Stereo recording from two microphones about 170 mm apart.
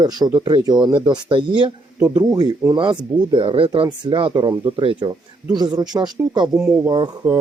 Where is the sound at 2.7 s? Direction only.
25° right (ahead or behind).